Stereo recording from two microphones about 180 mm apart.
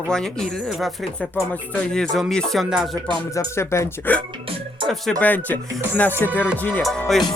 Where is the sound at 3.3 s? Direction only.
15° left (ahead or behind).